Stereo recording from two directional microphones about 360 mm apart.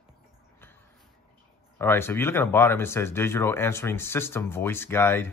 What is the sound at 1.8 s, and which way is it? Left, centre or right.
Speech, centre.